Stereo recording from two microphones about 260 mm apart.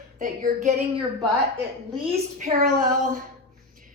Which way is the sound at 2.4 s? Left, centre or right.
Right.